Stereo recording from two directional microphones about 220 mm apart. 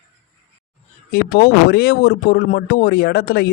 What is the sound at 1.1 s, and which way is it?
Speech, 45° left (ahead or behind).